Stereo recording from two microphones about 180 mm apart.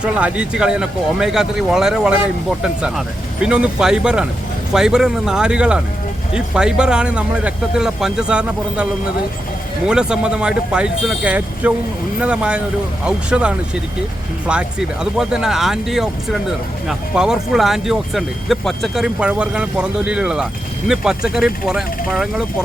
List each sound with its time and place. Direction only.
0.0 s speech: 5° right (ahead or behind)
3.4 s speech: 5° right (ahead or behind)
14.5 s speech: 5° right (ahead or behind)